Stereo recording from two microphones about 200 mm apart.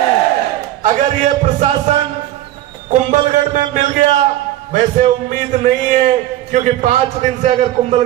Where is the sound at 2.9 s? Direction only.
35° right (ahead or behind).